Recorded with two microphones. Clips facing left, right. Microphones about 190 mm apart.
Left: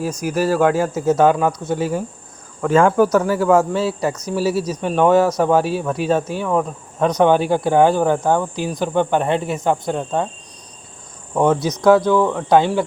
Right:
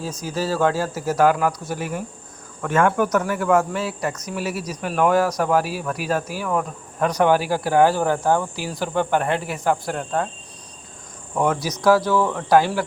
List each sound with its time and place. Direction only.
0.2 s speech: 15° left (ahead or behind)
11.3 s speech: 25° left (ahead or behind)